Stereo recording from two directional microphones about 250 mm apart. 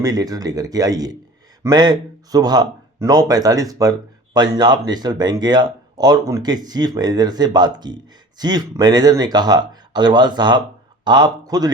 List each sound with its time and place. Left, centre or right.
0.0 s speech: centre